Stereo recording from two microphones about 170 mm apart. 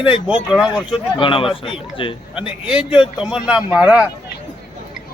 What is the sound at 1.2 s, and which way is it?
A man's voice, 30° left (ahead or behind).